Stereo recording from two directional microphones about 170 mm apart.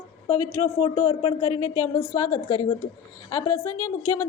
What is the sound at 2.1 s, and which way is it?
A woman's voice, 20° left (ahead or behind).